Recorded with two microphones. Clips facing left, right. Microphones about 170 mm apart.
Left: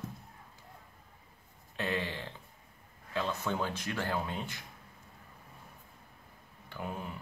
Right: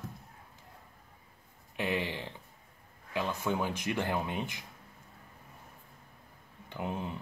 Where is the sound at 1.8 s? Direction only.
15° right (ahead or behind).